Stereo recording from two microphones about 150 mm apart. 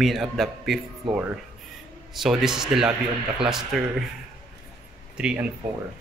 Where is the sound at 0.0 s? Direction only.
Centre (ahead or behind).